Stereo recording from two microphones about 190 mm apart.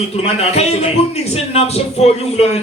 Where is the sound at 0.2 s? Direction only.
35° left (ahead or behind).